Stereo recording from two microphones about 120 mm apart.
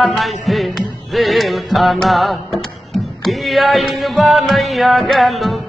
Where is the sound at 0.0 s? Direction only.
Centre (ahead or behind).